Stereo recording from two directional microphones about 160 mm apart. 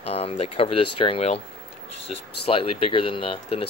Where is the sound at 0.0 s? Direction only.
40° left (ahead or behind).